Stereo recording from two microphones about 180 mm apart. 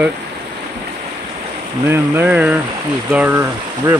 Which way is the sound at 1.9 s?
10° right (ahead or behind).